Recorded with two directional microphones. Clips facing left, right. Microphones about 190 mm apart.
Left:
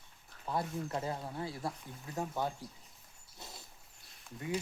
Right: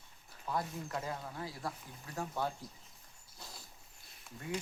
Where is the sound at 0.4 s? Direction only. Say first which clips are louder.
Left 2 dB; 25° left (ahead or behind).